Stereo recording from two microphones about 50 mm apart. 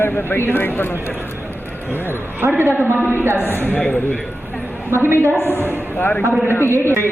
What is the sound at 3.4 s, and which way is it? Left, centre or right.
Speech, left.